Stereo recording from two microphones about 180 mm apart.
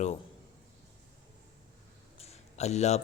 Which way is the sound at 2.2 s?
35° left (ahead or behind).